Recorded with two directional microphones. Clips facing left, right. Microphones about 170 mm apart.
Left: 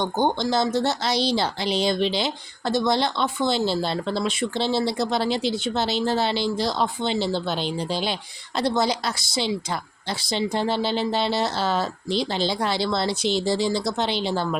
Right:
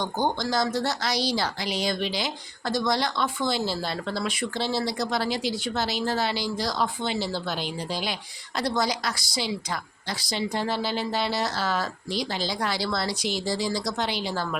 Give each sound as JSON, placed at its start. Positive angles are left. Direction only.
{"t": 0.0, "sound": "speech", "side_deg": 25}